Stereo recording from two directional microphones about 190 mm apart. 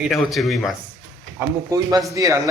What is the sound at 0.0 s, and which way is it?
Speech, centre (ahead or behind).